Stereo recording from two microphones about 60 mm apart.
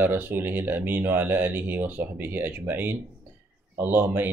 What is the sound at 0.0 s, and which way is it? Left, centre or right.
Speech, right.